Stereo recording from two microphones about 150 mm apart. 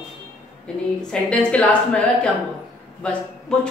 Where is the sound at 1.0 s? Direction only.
5° left (ahead or behind).